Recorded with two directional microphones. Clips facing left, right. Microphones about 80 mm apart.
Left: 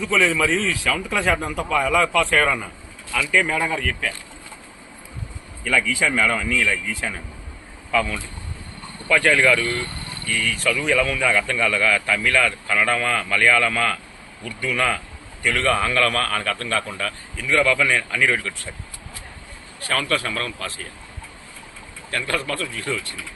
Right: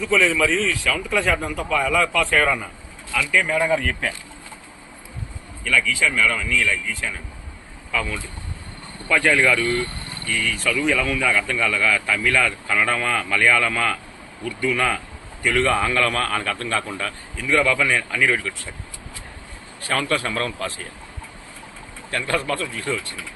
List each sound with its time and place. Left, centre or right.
0.0 s a man's voice: centre
5.6 s a man's voice: centre
19.9 s speech: right
22.1 s speech: centre